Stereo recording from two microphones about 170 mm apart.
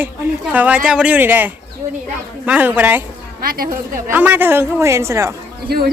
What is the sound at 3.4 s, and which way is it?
Speech, 60° right (ahead or behind).